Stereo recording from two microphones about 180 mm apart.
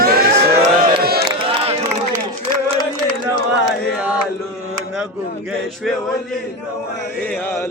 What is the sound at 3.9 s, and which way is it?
Chant, 5° right (ahead or behind).